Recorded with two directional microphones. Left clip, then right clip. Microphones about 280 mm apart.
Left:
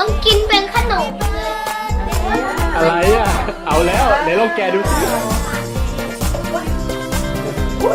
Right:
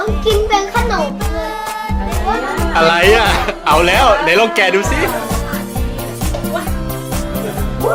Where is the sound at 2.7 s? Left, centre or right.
Centre.